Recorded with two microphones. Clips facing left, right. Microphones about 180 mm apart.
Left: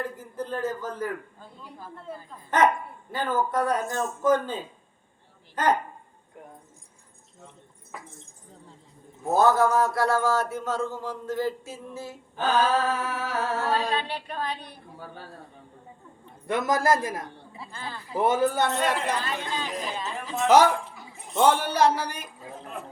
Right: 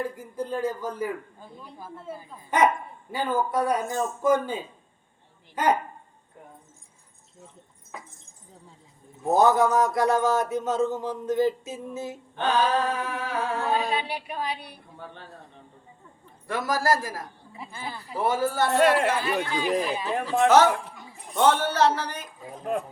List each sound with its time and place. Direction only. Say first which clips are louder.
0.0 s a man's voice: right 2 dB; 10° right (ahead or behind)
9.2 s speech: right 1 dB; 15° right (ahead or behind)
12.4 s a sound: even; 5° left (ahead or behind)
13.7 s a man's voice: even; 15° right (ahead or behind)
14.9 s speech: even; 5° left (ahead or behind)
16.5 s a man's voice: left 2 dB; 20° left (ahead or behind)
17.6 s a man's voice: right 2 dB; 15° right (ahead or behind)
18.1 s a man's voice: left 2 dB; 20° left (ahead or behind)
19.2 s a man's voice: right 5 dB; 10° right (ahead or behind)
21.3 s speech: even; 10° left (ahead or behind)